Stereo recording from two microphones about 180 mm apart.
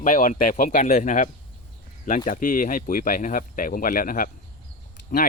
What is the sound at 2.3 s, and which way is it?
Speech, 50° left (ahead or behind).